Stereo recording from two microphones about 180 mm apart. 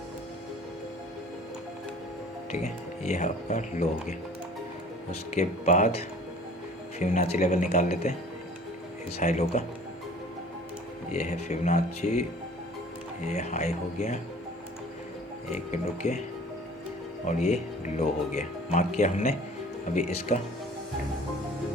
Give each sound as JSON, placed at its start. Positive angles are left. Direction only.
{"t": 2.5, "sound": "speech", "side_deg": 40}
{"t": 5.3, "sound": "speech", "side_deg": 40}
{"t": 9.1, "sound": "speech", "side_deg": 40}
{"t": 11.1, "sound": "speech", "side_deg": 40}
{"t": 13.2, "sound": "speech", "side_deg": 40}
{"t": 15.7, "sound": "speech", "side_deg": 40}
{"t": 17.2, "sound": "speech", "side_deg": 40}